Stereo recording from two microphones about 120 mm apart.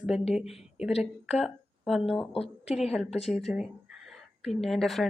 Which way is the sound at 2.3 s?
60° left (ahead or behind).